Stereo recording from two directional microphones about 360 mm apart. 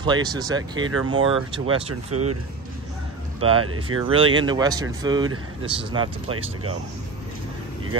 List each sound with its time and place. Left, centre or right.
0.0 s speech: centre
2.1 s speech: right
3.3 s speech: centre
3.6 s speech: right
4.0 s speech: centre
6.3 s speech: right